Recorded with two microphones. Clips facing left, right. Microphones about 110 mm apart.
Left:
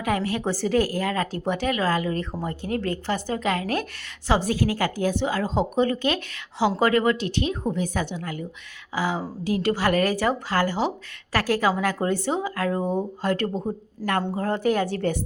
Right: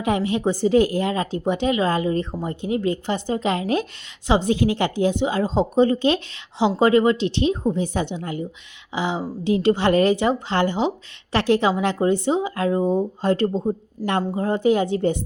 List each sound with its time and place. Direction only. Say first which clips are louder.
0.0 s speech: right 4 dB; 20° right (ahead or behind)